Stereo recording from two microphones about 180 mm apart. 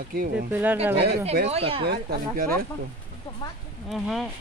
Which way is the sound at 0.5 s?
10° right (ahead or behind).